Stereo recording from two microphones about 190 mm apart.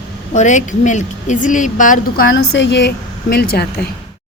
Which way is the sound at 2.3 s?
70° left (ahead or behind).